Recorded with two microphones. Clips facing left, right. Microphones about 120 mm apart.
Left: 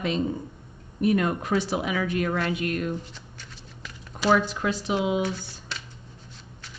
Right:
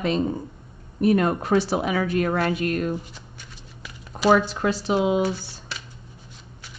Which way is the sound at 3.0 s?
10° right (ahead or behind).